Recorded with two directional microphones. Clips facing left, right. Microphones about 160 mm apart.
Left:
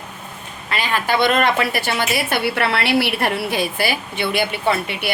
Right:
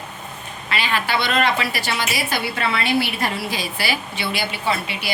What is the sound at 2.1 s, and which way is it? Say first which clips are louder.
A woman's voice: left 4 dB; 65° left (ahead or behind).